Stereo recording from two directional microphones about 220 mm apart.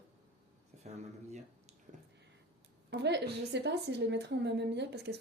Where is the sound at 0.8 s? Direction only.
30° right (ahead or behind).